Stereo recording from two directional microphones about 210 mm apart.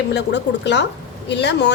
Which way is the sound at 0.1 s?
55° left (ahead or behind).